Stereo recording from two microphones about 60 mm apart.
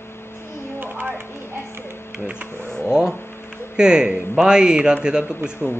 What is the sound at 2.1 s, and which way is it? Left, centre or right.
Music, centre.